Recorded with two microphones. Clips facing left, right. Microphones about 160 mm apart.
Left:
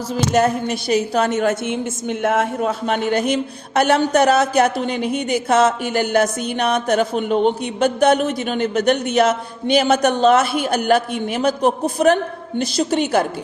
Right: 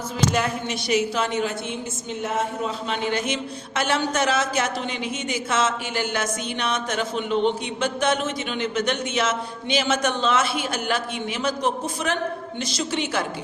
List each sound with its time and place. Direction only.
0.1 s a woman's voice: 45° left (ahead or behind)
4.2 s a woman's voice: 55° left (ahead or behind)